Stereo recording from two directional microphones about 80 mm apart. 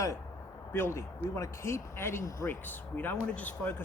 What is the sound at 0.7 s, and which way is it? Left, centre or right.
Speech, left.